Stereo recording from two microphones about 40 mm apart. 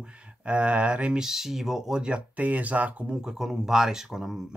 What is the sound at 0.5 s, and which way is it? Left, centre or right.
Speech, right.